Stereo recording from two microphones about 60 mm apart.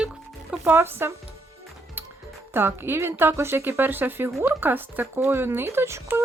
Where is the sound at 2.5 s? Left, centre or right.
Right.